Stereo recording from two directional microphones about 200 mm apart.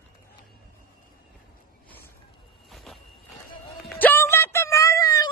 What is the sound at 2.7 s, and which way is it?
Vehicle, centre (ahead or behind).